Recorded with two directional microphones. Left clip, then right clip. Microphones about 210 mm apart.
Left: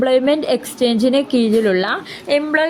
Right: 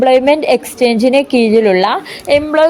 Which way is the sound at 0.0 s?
10° right (ahead or behind).